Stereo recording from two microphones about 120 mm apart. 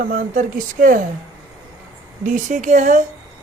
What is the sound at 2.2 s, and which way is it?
Speech, 90° right.